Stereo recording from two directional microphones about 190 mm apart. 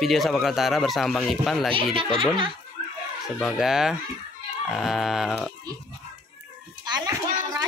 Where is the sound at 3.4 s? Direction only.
Centre (ahead or behind).